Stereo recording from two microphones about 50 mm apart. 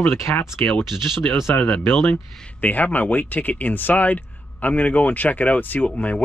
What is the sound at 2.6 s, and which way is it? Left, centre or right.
Speech, left.